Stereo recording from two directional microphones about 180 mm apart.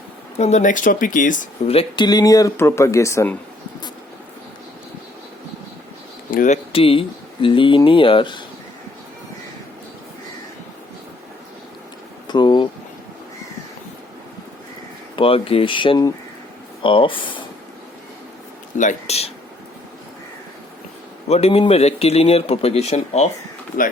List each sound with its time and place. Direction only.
0.3 s speech: 40° left (ahead or behind)
1.7 s speech: 30° left (ahead or behind)
6.3 s speech: 45° left (ahead or behind)
6.7 s speech: 30° left (ahead or behind)
12.3 s a sound: 25° left (ahead or behind)
15.1 s speech: 30° left (ahead or behind)
18.8 s speech: 40° left (ahead or behind)
21.2 s speech: 35° left (ahead or behind)